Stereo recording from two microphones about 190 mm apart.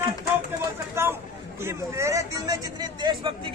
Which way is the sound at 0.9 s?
10° right (ahead or behind).